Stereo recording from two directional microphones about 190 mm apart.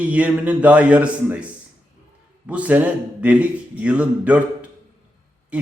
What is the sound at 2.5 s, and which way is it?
Speech, 5° right (ahead or behind).